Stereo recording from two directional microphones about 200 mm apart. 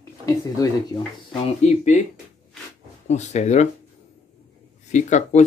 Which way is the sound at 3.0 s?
35° left (ahead or behind).